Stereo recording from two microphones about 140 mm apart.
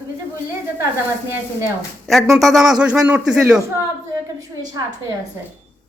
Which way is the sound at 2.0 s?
Centre (ahead or behind).